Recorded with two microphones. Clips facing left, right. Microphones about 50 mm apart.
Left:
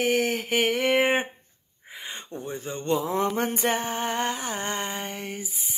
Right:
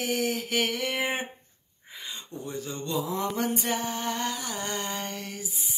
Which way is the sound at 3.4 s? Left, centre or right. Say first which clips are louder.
Left 3 dB; left.